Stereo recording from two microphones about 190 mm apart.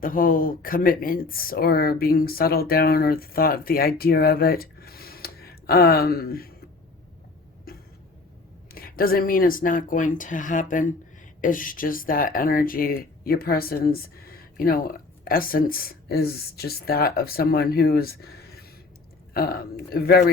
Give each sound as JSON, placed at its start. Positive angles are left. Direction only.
{"t": 0.0, "sound": "speech", "side_deg": 50}
{"t": 8.7, "sound": "speech", "side_deg": 50}